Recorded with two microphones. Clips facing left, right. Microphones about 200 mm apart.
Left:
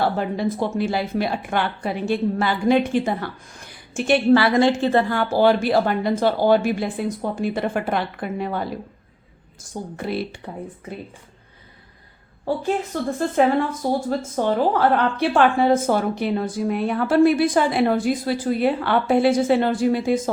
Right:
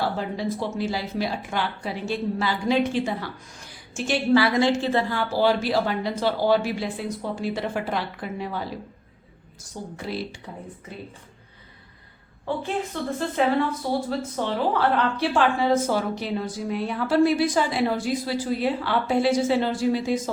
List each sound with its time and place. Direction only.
0.0 s a woman's voice: 55° left (ahead or behind)
12.5 s a woman's voice: 40° left (ahead or behind)